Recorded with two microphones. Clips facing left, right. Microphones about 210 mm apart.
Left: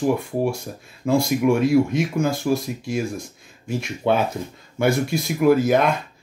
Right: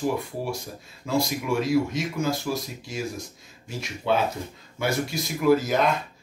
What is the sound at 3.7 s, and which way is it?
Speech, 55° left (ahead or behind).